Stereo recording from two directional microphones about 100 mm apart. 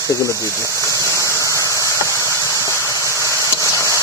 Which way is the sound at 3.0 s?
30° right (ahead or behind).